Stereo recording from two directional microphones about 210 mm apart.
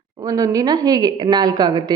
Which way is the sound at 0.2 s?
15° right (ahead or behind).